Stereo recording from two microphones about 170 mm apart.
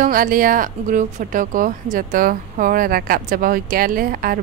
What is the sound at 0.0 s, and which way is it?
A woman's voice, 55° right (ahead or behind).